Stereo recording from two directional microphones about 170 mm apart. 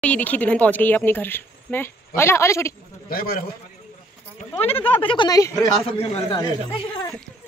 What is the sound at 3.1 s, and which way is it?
Speech, 60° left (ahead or behind).